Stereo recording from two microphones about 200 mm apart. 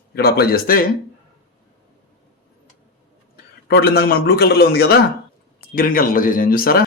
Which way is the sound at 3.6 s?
50° left (ahead or behind).